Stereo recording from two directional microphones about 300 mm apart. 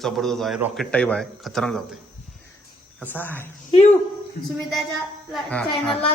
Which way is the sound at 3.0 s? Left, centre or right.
Centre.